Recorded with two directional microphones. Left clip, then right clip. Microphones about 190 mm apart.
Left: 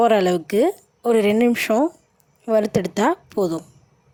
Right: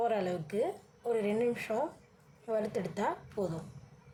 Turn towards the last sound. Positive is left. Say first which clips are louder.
# left 14 dB
turn(degrees=55)  # may be behind; listen again after turning